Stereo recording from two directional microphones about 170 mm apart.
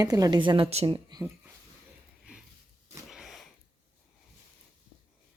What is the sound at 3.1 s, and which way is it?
Sniff, centre (ahead or behind).